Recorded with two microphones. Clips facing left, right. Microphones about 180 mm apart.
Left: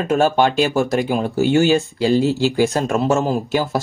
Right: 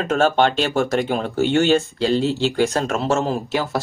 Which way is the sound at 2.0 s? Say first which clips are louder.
Left 3 dB; 10° left (ahead or behind).